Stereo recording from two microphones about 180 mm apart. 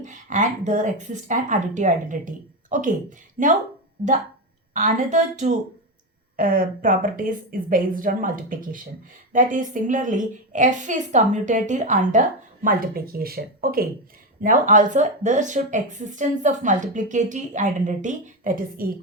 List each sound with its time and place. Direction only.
0.0 s speech: 45° right (ahead or behind)
4.7 s speech: 45° right (ahead or behind)
12.6 s speech: 55° right (ahead or behind)
14.4 s speech: 45° right (ahead or behind)